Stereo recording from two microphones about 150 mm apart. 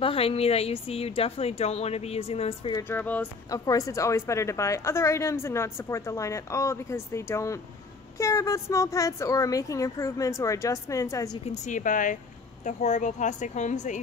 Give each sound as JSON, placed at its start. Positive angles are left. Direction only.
{"t": 0.0, "sound": "a woman's voice", "side_deg": 40}
{"t": 2.8, "sound": "speech", "side_deg": 15}
{"t": 3.4, "sound": "a woman's voice", "side_deg": 25}
{"t": 11.4, "sound": "a woman's voice", "side_deg": 55}